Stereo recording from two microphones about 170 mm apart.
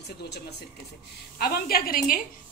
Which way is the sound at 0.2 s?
75° left (ahead or behind).